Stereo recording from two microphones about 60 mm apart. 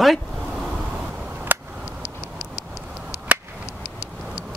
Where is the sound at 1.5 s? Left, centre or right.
Right.